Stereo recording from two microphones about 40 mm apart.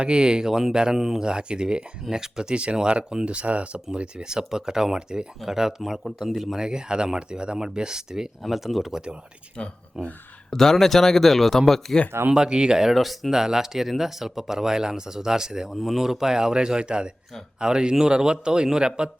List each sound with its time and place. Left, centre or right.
0.0 s speech: right
0.9 s speech: centre
1.2 s speech: right
3.9 s speech: right; by 6.6 s centre
6.6 s speech: centre
8.4 s speech: centre
9.6 s speech: left
10.5 s speech: centre
12.3 s speech: right
12.9 s speech: centre
13.3 s speech: centre
15.7 s speech: centre; by 19.1 s right